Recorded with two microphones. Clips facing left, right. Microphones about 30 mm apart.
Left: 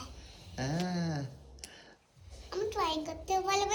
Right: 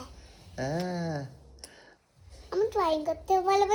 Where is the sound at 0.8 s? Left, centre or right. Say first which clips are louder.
Right 2 dB; centre.